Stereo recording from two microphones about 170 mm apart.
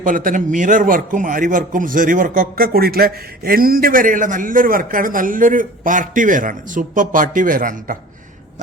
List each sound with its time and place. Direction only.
0.0 s a man's voice: 50° right (ahead or behind)